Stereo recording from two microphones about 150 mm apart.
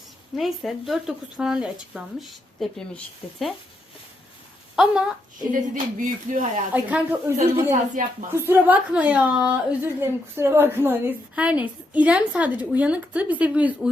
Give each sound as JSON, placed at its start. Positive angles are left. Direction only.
{"t": 0.3, "sound": "speech", "side_deg": 0}
{"t": 4.8, "sound": "speech", "side_deg": -5}
{"t": 5.5, "sound": "speech", "side_deg": -60}
{"t": 6.7, "sound": "a woman's voice", "side_deg": -10}
{"t": 7.7, "sound": "speech", "side_deg": -60}
{"t": 8.4, "sound": "a woman's voice", "side_deg": -15}